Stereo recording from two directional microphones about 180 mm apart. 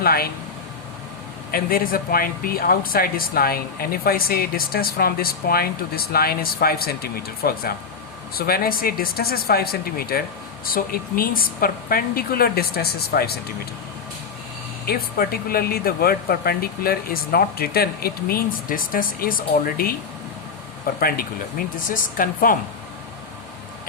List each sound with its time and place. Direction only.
0.0 s speech: 55° left (ahead or behind)
1.5 s speech: 55° left (ahead or behind)
14.8 s a woman's voice: 55° left (ahead or behind)